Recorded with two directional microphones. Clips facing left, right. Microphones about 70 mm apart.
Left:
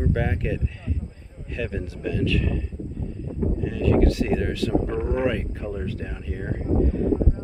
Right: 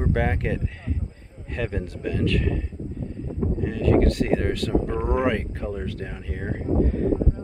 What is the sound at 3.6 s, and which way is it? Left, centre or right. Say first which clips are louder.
Speech: right 1 dB; right.